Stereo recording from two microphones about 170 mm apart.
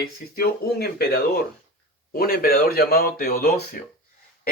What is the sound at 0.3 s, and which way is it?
Speech, 65° left (ahead or behind).